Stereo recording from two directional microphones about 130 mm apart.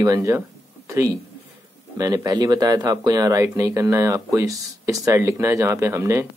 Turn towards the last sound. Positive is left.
turn(degrees=-20)  # may be behind; listen again after turning